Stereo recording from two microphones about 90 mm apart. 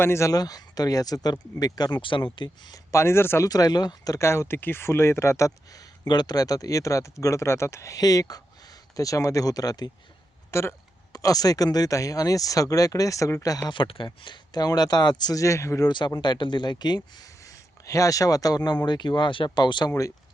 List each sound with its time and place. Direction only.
0.0 s speech: 30° left (ahead or behind); by 2.0 s 50° left (ahead or behind)
2.0 s speech: 65° left (ahead or behind)
2.7 s speech: 30° left (ahead or behind)
3.4 s speech: 45° left (ahead or behind)
4.2 s speech: 30° left (ahead or behind)
6.1 s speech: 50° left (ahead or behind)
10.5 s speech: 30° left (ahead or behind)
11.1 s speech: 40° left (ahead or behind)
13.7 s speech: 75° left (ahead or behind); by 15.9 s 35° left (ahead or behind)
15.9 s speech: 60° left (ahead or behind)
17.4 s speech: 35° left (ahead or behind); by 19.5 s 65° left (ahead or behind)
19.5 s speech: 55° left (ahead or behind)